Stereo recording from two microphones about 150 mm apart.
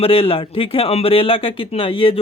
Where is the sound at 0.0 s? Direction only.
35° left (ahead or behind).